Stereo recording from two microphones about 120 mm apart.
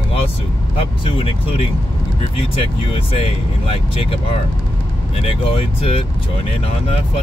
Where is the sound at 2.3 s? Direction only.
50° left (ahead or behind).